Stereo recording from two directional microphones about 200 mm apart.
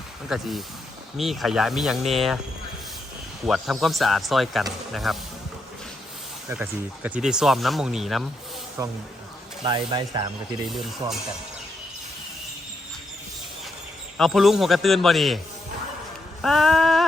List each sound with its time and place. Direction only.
0.3 s speech: centre (ahead or behind)
3.4 s speech: centre (ahead or behind)
6.5 s speech: 10° right (ahead or behind)
8.8 s speech: 15° right (ahead or behind)
11.0 s speech: 15° right (ahead or behind)
14.2 s speech: centre (ahead or behind)
16.4 s a sound: centre (ahead or behind)